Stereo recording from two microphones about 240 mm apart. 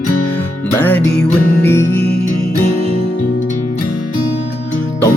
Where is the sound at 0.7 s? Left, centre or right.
Centre.